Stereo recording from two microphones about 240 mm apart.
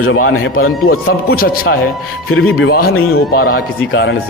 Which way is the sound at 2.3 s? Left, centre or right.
Left.